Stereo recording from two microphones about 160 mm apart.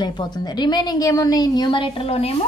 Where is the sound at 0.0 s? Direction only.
25° left (ahead or behind).